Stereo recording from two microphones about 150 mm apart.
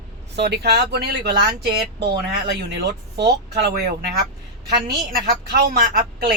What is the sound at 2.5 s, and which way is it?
Speech, 90° right.